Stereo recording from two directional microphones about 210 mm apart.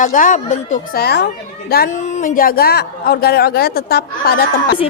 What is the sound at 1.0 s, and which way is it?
A man's voice, 50° left (ahead or behind).